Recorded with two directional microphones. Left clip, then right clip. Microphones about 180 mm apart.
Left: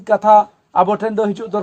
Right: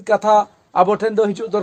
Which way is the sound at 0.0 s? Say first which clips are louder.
Left 3 dB; 30° right (ahead or behind).